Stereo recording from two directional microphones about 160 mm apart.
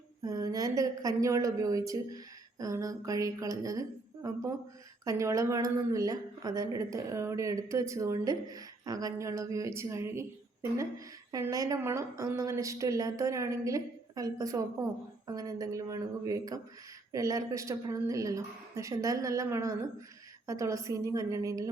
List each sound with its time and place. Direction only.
0.2 s a woman's voice: 25° right (ahead or behind)